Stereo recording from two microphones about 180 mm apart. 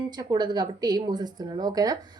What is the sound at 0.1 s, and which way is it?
A woman's voice, 20° right (ahead or behind).